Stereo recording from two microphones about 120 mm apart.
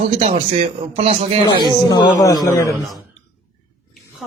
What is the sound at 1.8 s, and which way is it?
Speech, 30° left (ahead or behind).